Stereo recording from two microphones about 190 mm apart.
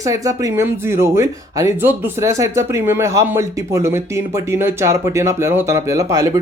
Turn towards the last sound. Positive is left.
turn(degrees=-15)  # may be behind; listen again after turning